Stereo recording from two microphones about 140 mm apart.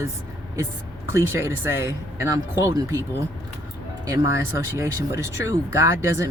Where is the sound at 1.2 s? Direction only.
20° right (ahead or behind).